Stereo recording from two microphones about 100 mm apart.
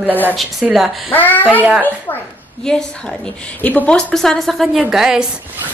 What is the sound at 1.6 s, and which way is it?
Speech, 15° right (ahead or behind).